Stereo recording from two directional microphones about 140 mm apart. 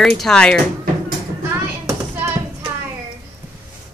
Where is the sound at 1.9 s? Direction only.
20° right (ahead or behind).